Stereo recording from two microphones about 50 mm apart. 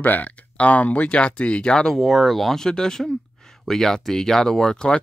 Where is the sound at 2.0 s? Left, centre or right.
Centre.